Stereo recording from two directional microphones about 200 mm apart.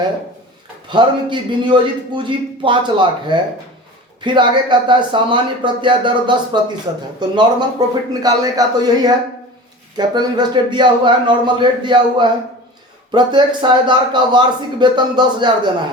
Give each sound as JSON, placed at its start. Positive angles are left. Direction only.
{"t": 0.9, "sound": "a man's voice", "side_deg": -25}
{"t": 10.0, "sound": "a man's voice", "side_deg": -20}